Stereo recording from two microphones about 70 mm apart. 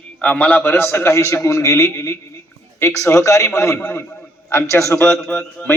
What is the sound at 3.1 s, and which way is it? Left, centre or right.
Speech, left.